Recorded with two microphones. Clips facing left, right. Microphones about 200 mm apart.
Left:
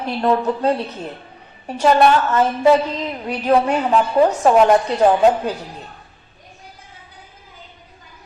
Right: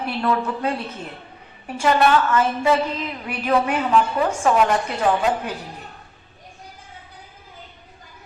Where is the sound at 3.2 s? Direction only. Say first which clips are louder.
Left 4 dB; 35° left (ahead or behind).